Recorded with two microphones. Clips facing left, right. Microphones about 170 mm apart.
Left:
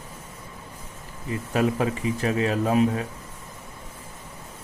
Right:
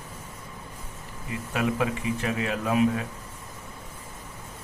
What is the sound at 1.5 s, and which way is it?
A man's voice, 35° left (ahead or behind).